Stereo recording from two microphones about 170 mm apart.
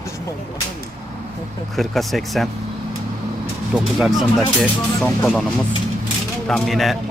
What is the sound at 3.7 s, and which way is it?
A man's voice, centre (ahead or behind).